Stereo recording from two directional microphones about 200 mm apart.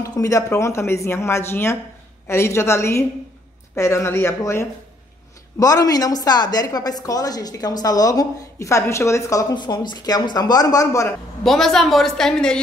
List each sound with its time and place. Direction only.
0.0 s a woman's voice: 15° left (ahead or behind)
11.4 s a woman's voice: centre (ahead or behind)